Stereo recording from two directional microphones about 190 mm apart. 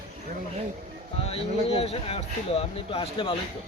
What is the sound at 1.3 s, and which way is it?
Speech, 30° left (ahead or behind).